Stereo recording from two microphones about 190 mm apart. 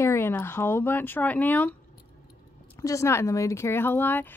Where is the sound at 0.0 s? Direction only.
15° left (ahead or behind).